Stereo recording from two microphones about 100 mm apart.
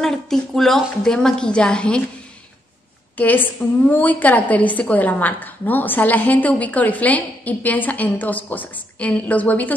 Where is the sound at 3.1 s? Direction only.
20° left (ahead or behind).